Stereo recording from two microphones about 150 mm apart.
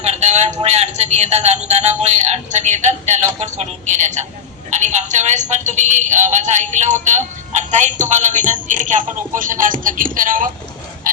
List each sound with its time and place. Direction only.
0.0 s a sound: 45° right (ahead or behind)
3.4 s speech: 50° right (ahead or behind)
11.1 s pig: 60° right (ahead or behind)